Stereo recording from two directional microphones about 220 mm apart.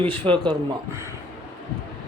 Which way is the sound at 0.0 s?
25° right (ahead or behind).